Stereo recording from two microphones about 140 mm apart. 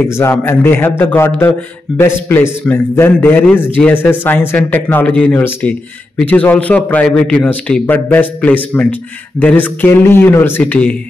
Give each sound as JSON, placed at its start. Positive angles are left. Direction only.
{"t": 0.0, "sound": "a man's voice", "side_deg": 15}